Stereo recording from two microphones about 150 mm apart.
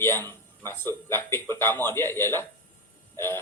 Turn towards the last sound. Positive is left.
turn(degrees=15)  # may be behind; listen again after turning